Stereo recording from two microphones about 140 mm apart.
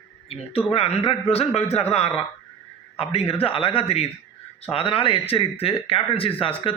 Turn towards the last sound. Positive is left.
turn(degrees=40)  # may be behind; listen again after turning